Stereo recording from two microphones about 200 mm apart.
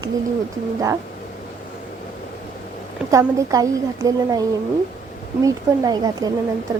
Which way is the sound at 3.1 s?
15° right (ahead or behind).